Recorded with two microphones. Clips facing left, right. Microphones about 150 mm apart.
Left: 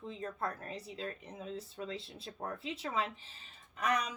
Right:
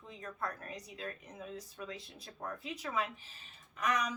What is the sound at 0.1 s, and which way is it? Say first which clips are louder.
Speech: left 2 dB; 30° left (ahead or behind).